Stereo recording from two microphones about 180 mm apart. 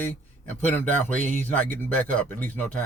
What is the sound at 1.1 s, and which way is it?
Speech, 45° right (ahead or behind).